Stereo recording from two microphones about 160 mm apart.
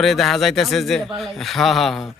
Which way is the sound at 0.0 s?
Centre (ahead or behind).